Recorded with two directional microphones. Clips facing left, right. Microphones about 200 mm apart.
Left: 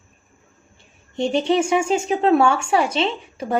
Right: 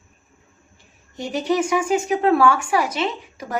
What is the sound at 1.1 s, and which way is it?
Speech, 25° left (ahead or behind).